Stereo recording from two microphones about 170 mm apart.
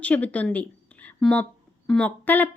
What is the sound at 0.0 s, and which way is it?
A woman's voice, 10° left (ahead or behind).